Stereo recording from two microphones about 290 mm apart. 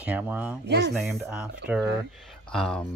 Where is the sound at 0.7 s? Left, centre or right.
Right.